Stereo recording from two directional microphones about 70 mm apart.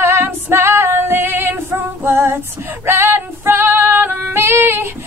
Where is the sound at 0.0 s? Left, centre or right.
Right.